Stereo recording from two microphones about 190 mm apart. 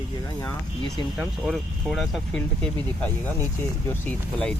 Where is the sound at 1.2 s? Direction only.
Centre (ahead or behind).